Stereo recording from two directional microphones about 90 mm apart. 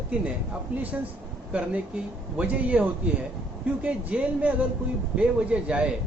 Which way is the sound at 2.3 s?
15° right (ahead or behind).